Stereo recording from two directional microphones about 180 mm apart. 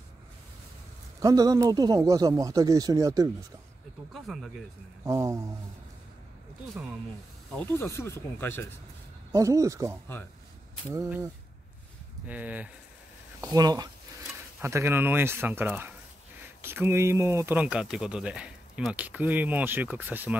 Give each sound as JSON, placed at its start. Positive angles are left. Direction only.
{"t": 1.2, "sound": "speech", "side_deg": -20}
{"t": 4.1, "sound": "speech", "side_deg": 0}
{"t": 5.0, "sound": "speech", "side_deg": -15}
{"t": 7.5, "sound": "speech", "side_deg": 10}
{"t": 9.3, "sound": "speech", "side_deg": -20}
{"t": 12.3, "sound": "speech", "side_deg": -10}
{"t": 13.4, "sound": "speech", "side_deg": -20}